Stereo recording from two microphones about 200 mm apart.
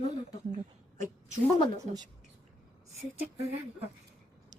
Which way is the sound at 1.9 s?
35° right (ahead or behind).